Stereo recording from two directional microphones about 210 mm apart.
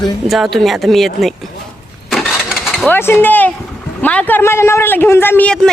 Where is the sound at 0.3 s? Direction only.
Centre (ahead or behind).